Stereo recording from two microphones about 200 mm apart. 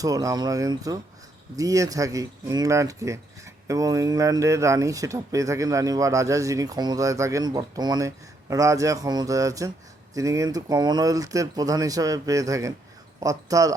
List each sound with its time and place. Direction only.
0.0 s speech: 15° right (ahead or behind)